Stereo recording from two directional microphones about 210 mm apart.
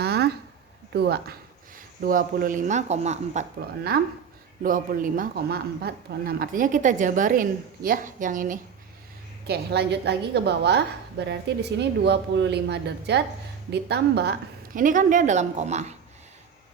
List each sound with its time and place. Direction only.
0.0 s a sound: 50° right (ahead or behind)
0.9 s speech: 50° right (ahead or behind); by 3.4 s 30° right (ahead or behind)
4.6 s a woman's voice: 40° right (ahead or behind)
9.5 s a woman's voice: 50° right (ahead or behind); by 15.9 s 35° right (ahead or behind)